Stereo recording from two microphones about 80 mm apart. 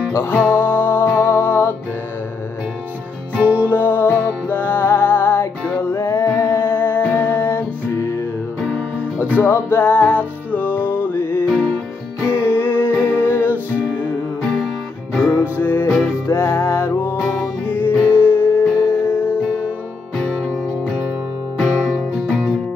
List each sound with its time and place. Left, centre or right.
0.1 s music: left
3.3 s music: centre
3.7 s music: left
5.8 s music: left
9.2 s music: left
15.3 s music: left
17.2 s music: centre
17.6 s music: left
20.2 s music: centre
21.5 s music: centre